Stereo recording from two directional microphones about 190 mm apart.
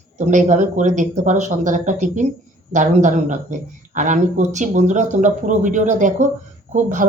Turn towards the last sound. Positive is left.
turn(degrees=-40)  # may be behind; listen again after turning